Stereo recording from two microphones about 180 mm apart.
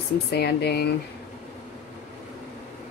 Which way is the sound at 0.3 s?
65° left (ahead or behind).